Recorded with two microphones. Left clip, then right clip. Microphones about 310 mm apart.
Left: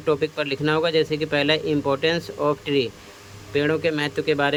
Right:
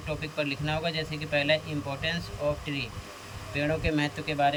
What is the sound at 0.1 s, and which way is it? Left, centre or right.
Speech, centre.